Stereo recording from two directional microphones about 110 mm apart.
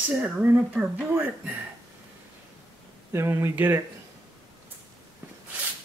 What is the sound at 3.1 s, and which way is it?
Speech, 25° right (ahead or behind).